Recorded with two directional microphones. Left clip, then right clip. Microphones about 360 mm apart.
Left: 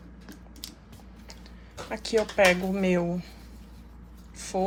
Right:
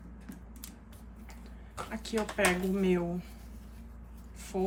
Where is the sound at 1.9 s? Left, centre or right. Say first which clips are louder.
Left 9 dB; centre.